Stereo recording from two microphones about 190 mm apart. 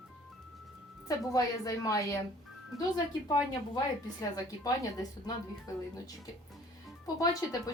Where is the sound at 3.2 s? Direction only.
20° left (ahead or behind).